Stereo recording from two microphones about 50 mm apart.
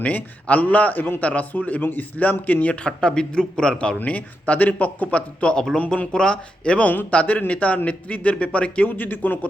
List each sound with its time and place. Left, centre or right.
0.0 s a man's voice: left
4.0 s speech: left
8.9 s a man's voice: left